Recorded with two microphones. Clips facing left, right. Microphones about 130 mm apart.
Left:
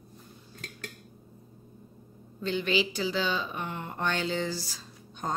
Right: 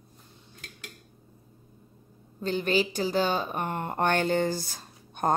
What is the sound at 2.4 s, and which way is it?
Speech, 45° right (ahead or behind).